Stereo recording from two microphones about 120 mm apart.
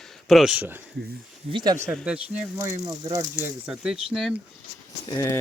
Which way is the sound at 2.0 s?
10° right (ahead or behind).